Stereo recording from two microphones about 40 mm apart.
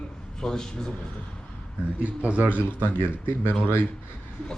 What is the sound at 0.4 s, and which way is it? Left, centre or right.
Speech, centre.